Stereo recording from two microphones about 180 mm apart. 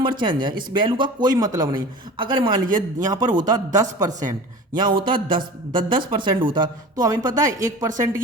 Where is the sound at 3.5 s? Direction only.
20° right (ahead or behind).